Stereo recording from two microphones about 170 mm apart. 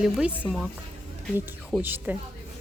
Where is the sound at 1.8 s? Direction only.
10° right (ahead or behind).